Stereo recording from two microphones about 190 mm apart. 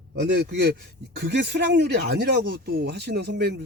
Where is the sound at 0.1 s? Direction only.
60° right (ahead or behind).